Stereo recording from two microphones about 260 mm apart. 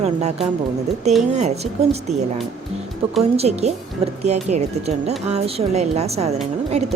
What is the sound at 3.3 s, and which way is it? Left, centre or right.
Speech, right.